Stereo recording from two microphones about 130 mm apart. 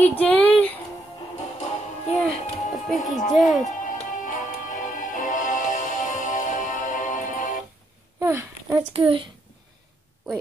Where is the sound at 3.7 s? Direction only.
80° left.